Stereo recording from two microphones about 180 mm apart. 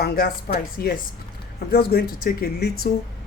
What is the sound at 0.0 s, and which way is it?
Speech, 60° left (ahead or behind).